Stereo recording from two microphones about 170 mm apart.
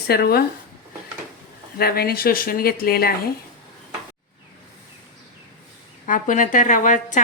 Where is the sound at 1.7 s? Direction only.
65° left (ahead or behind).